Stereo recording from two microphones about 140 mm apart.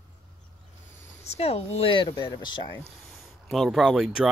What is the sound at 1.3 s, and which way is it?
Speech, 45° left (ahead or behind).